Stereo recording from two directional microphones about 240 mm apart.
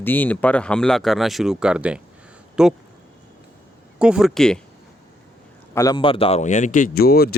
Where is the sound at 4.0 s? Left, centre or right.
Centre.